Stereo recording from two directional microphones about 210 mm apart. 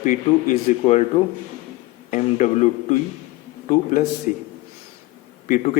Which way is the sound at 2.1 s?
35° left (ahead or behind).